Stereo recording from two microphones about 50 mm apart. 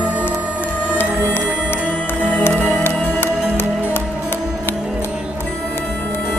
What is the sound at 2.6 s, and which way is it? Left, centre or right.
Music, left.